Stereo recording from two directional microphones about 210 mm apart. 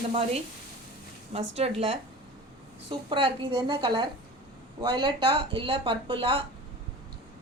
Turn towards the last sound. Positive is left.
turn(degrees=-25)  # may be behind; listen again after turning